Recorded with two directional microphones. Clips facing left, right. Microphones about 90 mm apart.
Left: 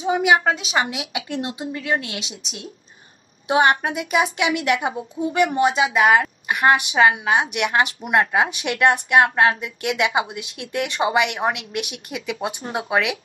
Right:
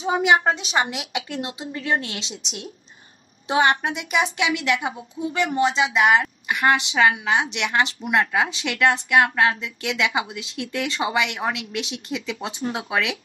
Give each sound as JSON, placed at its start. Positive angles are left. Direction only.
{"t": 0.0, "sound": "a woman's voice", "side_deg": -30}
{"t": 1.3, "sound": "a woman's voice", "side_deg": 25}
{"t": 1.7, "sound": "a woman's voice", "side_deg": -35}
{"t": 2.4, "sound": "speech", "side_deg": 35}
{"t": 3.4, "sound": "a woman's voice", "side_deg": 20}
{"t": 5.7, "sound": "speech", "side_deg": 45}
{"t": 6.4, "sound": "a woman's voice", "side_deg": 20}
{"t": 8.1, "sound": "a woman's voice", "side_deg": 25}